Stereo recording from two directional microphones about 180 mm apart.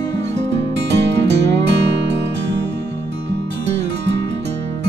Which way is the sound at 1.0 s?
75° right (ahead or behind).